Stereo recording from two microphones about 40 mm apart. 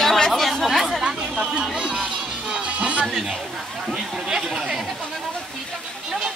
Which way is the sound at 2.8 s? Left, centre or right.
Right.